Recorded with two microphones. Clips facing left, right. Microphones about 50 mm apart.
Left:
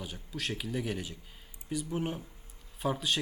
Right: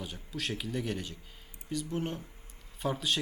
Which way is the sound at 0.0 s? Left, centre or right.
Centre.